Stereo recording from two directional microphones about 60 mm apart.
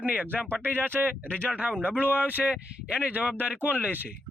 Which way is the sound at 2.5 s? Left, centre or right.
Centre.